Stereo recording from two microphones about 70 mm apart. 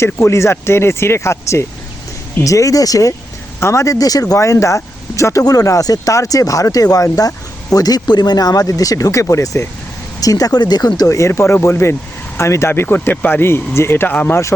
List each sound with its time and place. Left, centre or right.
0.0 s speech: left
3.6 s speech: left
10.2 s speech: left
11.0 s speech: left